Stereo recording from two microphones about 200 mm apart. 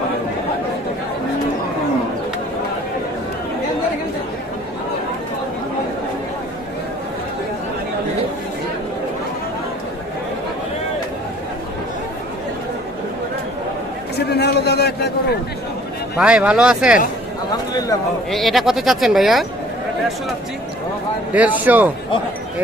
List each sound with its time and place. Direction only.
14.1 s a sound: 55° left (ahead or behind)
16.2 s speech: 5° right (ahead or behind)
17.5 s speech: 20° left (ahead or behind)
18.3 s speech: centre (ahead or behind)
21.3 s speech: 10° right (ahead or behind)